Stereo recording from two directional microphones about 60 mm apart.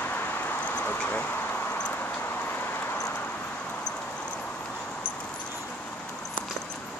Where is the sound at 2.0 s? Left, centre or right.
Left.